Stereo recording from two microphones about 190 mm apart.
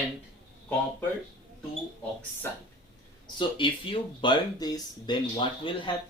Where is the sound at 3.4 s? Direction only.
25° left (ahead or behind).